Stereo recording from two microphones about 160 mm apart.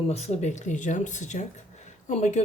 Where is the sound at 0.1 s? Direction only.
40° left (ahead or behind).